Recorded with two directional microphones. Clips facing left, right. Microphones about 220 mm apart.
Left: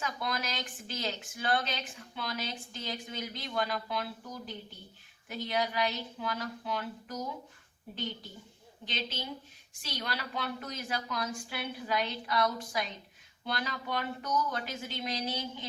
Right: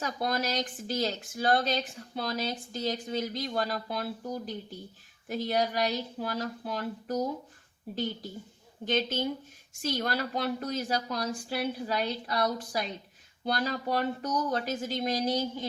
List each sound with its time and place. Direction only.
0.0 s speech: 40° right (ahead or behind)
8.8 s speech: 50° right (ahead or behind)